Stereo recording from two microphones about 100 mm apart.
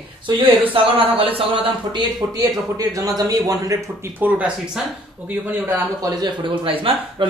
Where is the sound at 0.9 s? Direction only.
70° right (ahead or behind).